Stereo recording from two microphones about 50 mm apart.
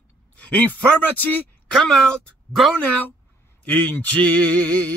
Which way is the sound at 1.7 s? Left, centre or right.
Centre.